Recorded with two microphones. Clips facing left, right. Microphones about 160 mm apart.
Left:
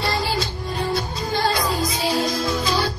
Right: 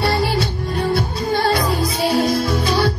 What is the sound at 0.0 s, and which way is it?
Music, 60° right (ahead or behind).